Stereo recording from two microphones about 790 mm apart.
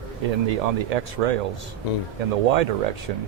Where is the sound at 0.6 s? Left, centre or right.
Right.